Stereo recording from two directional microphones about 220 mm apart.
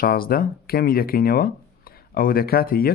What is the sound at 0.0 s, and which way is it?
Speech, 40° left (ahead or behind).